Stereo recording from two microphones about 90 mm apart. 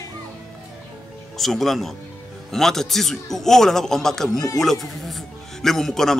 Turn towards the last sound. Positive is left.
turn(degrees=5)  # may be behind; listen again after turning